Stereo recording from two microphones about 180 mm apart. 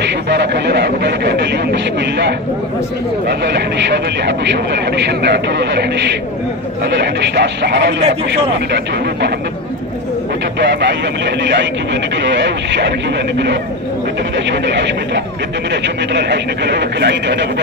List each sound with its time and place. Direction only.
0.0 s speech: 70° right (ahead or behind)
10.6 s speech: 75° right (ahead or behind)
14.5 s speech: 75° right (ahead or behind)